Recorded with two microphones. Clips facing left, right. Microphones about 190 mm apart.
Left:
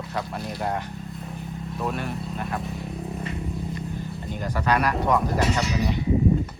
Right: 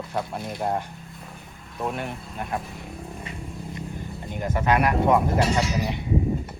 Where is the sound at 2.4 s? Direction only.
Centre (ahead or behind).